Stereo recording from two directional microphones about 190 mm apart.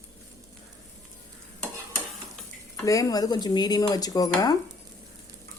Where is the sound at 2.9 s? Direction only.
15° left (ahead or behind).